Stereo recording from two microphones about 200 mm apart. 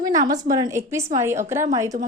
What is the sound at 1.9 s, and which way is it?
Speech, 40° right (ahead or behind).